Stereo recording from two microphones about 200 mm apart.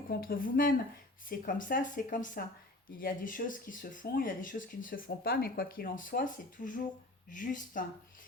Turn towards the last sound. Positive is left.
turn(degrees=40)  # may be behind; listen again after turning